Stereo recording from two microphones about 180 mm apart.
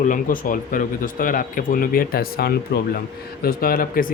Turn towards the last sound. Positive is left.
turn(degrees=55)  # may be behind; listen again after turning